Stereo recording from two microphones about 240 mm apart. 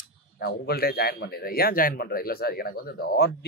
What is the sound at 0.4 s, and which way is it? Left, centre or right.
Speech, left.